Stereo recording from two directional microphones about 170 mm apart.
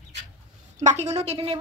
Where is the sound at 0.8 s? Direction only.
40° right (ahead or behind).